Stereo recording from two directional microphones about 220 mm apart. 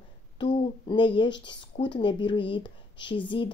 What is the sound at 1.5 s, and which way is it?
Speech, 20° left (ahead or behind).